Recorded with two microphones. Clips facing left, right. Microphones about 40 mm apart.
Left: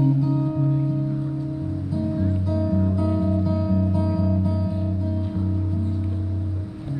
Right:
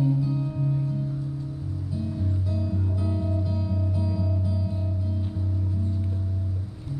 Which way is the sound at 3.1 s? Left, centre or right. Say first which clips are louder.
Left 7 dB; left.